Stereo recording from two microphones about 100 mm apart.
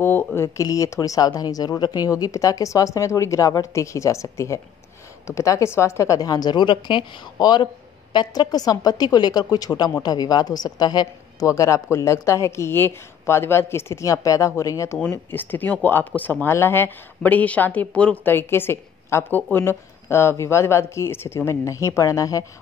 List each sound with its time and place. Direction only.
0.0 s a woman's voice: 20° left (ahead or behind)
15.0 s speech: 15° left (ahead or behind); by 22.4 s 35° left (ahead or behind)